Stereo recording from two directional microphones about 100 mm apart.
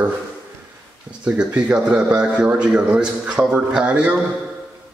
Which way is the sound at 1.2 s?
10° right (ahead or behind).